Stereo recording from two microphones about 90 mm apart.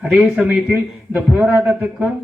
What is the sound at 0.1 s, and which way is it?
A man's voice, 10° right (ahead or behind).